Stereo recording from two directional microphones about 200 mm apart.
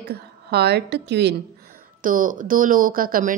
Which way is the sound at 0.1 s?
55° right (ahead or behind).